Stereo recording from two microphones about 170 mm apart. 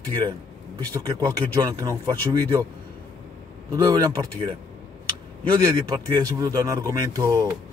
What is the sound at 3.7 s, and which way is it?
Speech, 20° right (ahead or behind).